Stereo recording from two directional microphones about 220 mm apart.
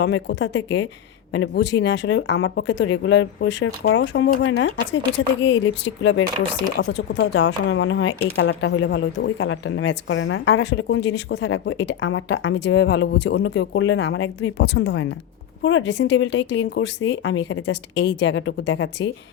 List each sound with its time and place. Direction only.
0.0 s speech: 55° left (ahead or behind)